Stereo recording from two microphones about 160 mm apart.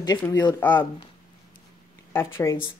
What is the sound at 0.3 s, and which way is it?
Speech, 25° left (ahead or behind).